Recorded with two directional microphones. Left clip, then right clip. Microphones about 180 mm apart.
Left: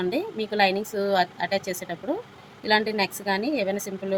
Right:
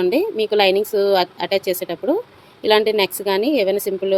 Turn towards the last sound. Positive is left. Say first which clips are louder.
# right 9 dB
turn(degrees=-45)  # may be behind; listen again after turning